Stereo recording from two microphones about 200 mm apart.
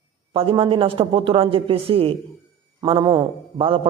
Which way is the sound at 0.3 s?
25° right (ahead or behind).